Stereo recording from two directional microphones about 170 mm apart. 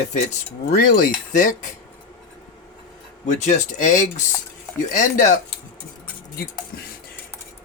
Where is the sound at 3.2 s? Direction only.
45° left (ahead or behind).